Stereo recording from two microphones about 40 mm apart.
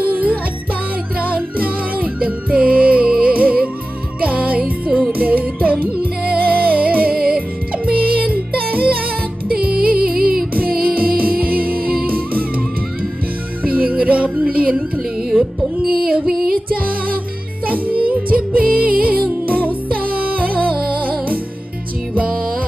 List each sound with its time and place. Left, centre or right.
0.0 s music: right
13.7 s music: right
17.6 s music: right